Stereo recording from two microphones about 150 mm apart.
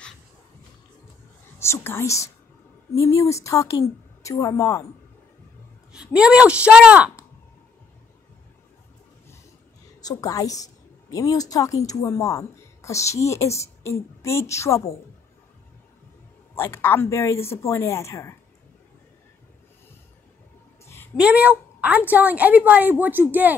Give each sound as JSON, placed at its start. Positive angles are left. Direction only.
{"t": 1.6, "sound": "a woman's voice", "side_deg": 15}
{"t": 5.9, "sound": "a woman's voice", "side_deg": -5}
{"t": 10.0, "sound": "a woman's voice", "side_deg": 25}
{"t": 16.5, "sound": "speech", "side_deg": 15}
{"t": 20.8, "sound": "a sound", "side_deg": 15}
{"t": 21.2, "sound": "a woman's voice", "side_deg": -10}